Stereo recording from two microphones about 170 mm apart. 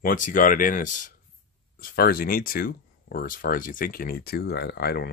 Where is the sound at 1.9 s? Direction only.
60° left (ahead or behind).